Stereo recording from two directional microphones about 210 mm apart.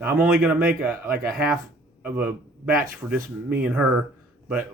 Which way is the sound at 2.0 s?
5° right (ahead or behind).